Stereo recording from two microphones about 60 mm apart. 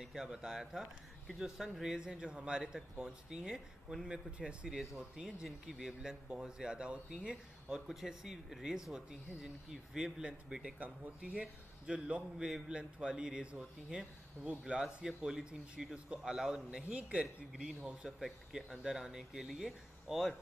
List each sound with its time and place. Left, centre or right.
0.0 s speech: centre
16.9 s speech: centre